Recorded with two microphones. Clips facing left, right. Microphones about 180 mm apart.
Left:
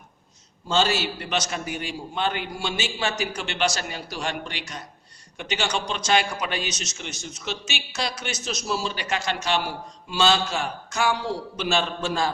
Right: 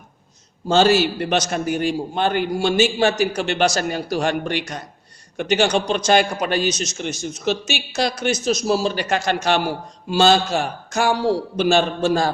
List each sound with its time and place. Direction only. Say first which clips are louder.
0.7 s a man's voice: right 8 dB; 50° right (ahead or behind)